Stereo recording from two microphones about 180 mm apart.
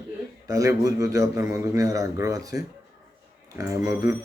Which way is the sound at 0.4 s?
20° right (ahead or behind).